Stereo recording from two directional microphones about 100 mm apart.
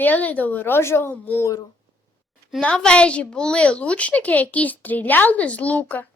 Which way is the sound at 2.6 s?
10° left (ahead or behind).